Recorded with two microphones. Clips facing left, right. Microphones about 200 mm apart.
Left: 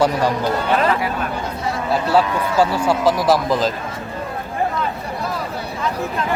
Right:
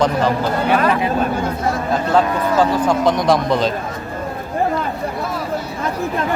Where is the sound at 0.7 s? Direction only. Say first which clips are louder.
Right 3 dB; 20° right (ahead or behind).